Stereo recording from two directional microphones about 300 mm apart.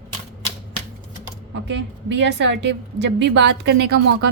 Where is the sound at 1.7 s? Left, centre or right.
Right.